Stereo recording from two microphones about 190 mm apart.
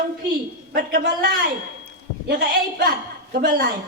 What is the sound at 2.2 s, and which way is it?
A woman's voice, 55° right (ahead or behind).